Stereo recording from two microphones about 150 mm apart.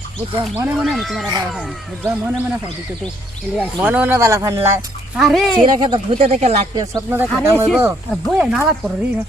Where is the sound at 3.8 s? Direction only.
10° right (ahead or behind).